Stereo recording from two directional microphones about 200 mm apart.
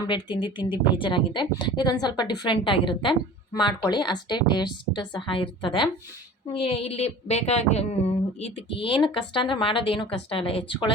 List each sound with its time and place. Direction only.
0.1 s a woman's voice: 25° left (ahead or behind)